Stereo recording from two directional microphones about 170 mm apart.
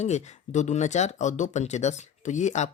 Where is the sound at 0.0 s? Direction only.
45° left (ahead or behind).